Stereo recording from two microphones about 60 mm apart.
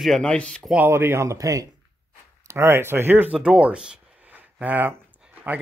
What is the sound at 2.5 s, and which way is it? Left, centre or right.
Speech, right.